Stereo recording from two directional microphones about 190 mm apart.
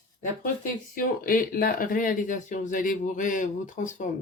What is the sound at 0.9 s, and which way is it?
Speech, 50° left (ahead or behind).